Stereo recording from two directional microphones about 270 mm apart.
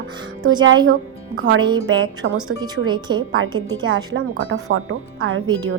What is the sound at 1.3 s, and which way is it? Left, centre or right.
Speech, right.